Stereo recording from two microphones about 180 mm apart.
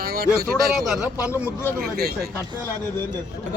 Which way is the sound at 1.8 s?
60° right (ahead or behind).